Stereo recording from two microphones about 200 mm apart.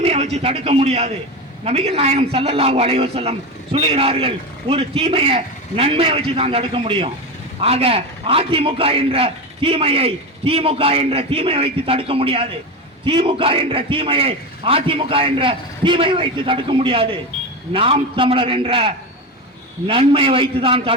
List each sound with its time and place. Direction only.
0.0 s a man's voice: 30° right (ahead or behind)